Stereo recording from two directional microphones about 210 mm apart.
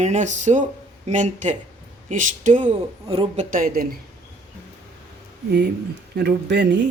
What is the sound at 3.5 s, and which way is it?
Speech, 40° right (ahead or behind).